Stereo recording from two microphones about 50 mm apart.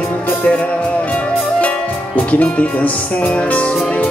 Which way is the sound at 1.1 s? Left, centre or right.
Left.